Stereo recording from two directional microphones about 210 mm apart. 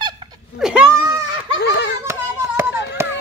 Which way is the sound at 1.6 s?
55° left (ahead or behind).